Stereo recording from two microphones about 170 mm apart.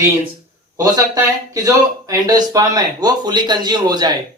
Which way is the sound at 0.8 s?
20° right (ahead or behind).